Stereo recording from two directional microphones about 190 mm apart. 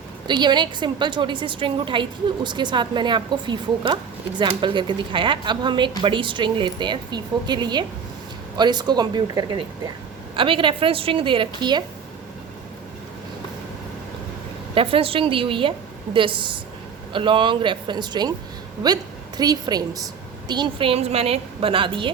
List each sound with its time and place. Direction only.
0.3 s a woman's voice: 25° right (ahead or behind)
14.8 s a woman's voice: 30° right (ahead or behind)
19.4 s a woman's voice: 20° right (ahead or behind)